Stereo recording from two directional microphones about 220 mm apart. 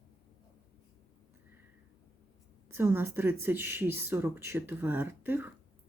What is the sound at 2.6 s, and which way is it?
Speech, 10° right (ahead or behind).